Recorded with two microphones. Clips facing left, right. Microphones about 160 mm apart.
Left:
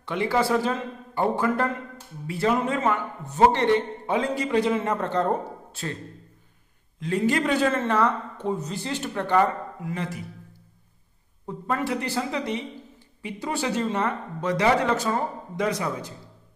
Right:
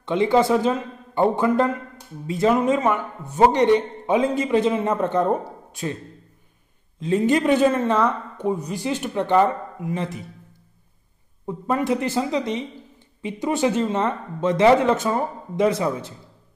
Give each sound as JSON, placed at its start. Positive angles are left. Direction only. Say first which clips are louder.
{"t": 0.0, "sound": "a man's voice", "louder": "right 6 dB", "side_deg": -20}
{"t": 7.0, "sound": "speech", "louder": "right 4 dB", "side_deg": -20}
{"t": 11.4, "sound": "speech", "louder": "right 5 dB", "side_deg": -20}